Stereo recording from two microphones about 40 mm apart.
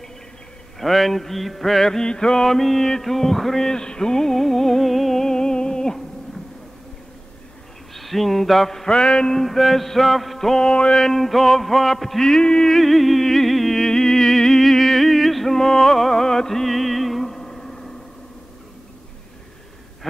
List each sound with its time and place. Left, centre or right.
0.7 s mantra: centre
7.9 s a man's voice: centre
8.8 s music: left
9.3 s mantra: centre
10.6 s music: left
11.1 s mantra: centre
12.2 s music: centre
12.7 s music: centre